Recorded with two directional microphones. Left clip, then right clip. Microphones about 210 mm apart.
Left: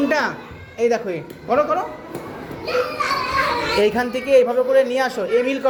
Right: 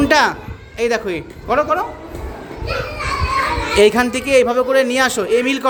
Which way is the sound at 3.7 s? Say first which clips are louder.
Right 9 dB; 30° right (ahead or behind).